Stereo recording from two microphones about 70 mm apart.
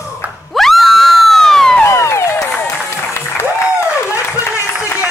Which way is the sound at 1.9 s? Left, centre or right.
Left.